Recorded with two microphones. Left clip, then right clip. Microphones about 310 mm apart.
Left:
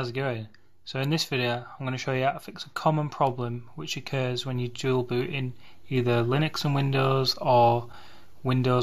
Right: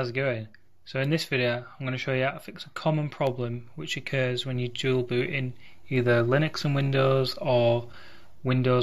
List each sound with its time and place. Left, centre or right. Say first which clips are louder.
0.0 s speech: right 2 dB; centre